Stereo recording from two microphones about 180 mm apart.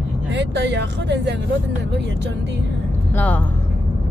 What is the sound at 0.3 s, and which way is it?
Speech, 75° right (ahead or behind).